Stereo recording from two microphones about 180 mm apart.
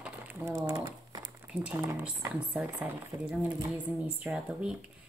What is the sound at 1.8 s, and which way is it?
Speech, 15° right (ahead or behind).